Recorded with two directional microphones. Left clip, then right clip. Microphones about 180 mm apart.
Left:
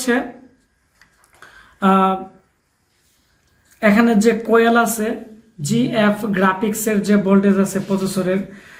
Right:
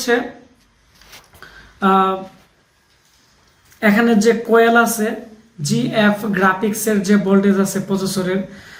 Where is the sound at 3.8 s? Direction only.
45° left (ahead or behind).